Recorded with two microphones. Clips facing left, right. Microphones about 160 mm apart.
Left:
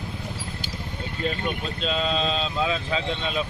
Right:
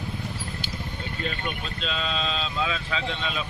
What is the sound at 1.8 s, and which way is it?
Speech, 35° left (ahead or behind).